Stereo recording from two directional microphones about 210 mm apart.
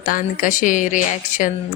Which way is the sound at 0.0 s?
40° left (ahead or behind).